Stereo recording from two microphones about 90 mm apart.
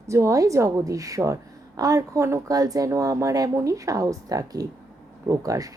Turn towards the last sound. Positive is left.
turn(degrees=-40)  # may be behind; listen again after turning